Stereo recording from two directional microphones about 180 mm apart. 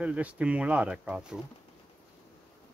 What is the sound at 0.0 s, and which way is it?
Speech, 5° right (ahead or behind).